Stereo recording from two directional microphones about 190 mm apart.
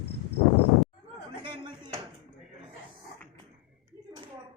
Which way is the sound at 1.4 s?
25° right (ahead or behind).